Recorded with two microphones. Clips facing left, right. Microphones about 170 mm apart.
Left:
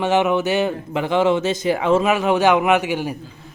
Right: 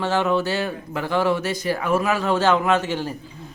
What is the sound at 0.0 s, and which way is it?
Speech, 20° left (ahead or behind).